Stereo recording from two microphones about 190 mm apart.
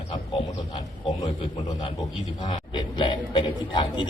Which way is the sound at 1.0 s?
30° left (ahead or behind).